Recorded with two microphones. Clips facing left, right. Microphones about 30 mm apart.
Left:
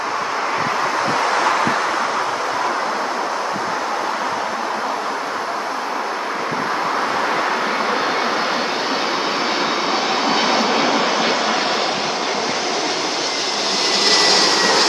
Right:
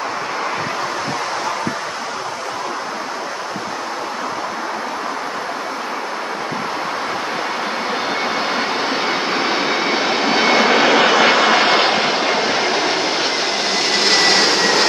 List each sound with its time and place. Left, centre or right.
9.1 s vehicle: centre
10.5 s vehicle: right
12.3 s vehicle: right
13.8 s vehicle: centre